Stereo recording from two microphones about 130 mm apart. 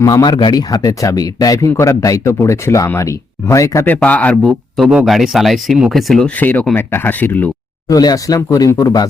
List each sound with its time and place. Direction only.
0.0 s speech: 30° left (ahead or behind)
3.9 s a man's voice: 10° left (ahead or behind)
4.9 s a man's voice: 5° right (ahead or behind); by 7.5 s 15° left (ahead or behind)
7.9 s speech: 30° left (ahead or behind)